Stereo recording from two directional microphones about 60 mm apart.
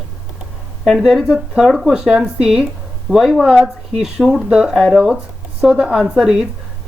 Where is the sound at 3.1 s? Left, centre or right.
Centre.